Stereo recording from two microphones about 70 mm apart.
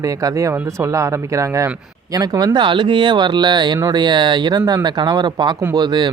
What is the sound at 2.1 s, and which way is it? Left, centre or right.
Speech, right.